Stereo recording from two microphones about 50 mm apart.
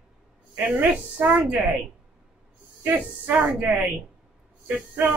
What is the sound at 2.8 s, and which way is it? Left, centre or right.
Speech, right.